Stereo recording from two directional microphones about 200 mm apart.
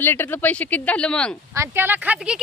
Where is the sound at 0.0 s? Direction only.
10° left (ahead or behind).